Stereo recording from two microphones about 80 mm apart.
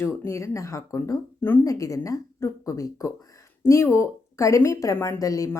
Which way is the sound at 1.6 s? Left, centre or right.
Left.